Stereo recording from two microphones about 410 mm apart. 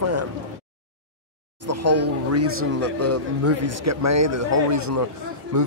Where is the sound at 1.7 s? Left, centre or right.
Right.